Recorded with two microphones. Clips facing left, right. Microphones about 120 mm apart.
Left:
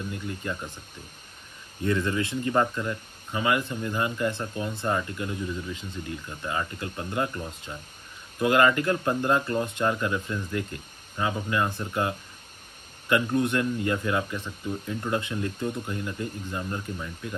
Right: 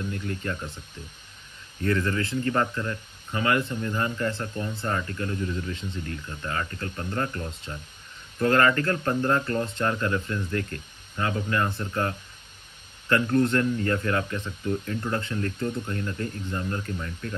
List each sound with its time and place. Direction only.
0.1 s speech: 5° left (ahead or behind)
1.8 s speech: 15° left (ahead or behind)